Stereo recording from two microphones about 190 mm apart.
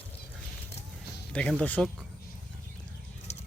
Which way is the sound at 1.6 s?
5° left (ahead or behind).